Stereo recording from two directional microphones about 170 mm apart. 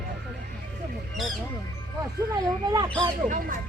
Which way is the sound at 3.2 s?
50° right (ahead or behind).